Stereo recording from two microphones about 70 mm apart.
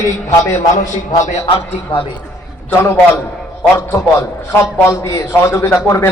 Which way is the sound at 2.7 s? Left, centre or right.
Left.